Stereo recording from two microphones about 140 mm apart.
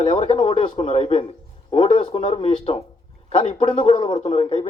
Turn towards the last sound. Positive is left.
turn(degrees=40)  # may be behind; listen again after turning